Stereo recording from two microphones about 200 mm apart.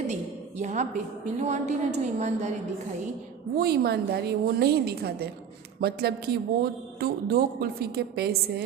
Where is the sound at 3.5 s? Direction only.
50° right (ahead or behind).